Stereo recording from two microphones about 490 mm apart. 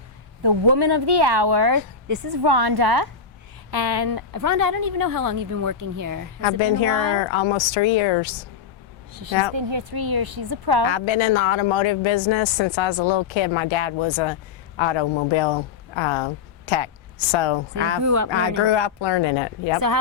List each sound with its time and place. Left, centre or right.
0.4 s a woman's voice: right
6.4 s speech: left
9.6 s speech: right
10.8 s speech: left
18.0 s a woman's voice: right
18.3 s speech: left